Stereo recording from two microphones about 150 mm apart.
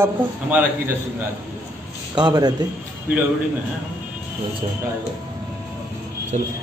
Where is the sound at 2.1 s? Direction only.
30° right (ahead or behind).